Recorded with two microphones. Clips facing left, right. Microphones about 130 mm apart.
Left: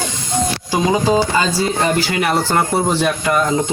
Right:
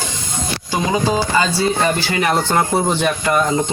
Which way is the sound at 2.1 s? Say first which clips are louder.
Even; 5° left (ahead or behind).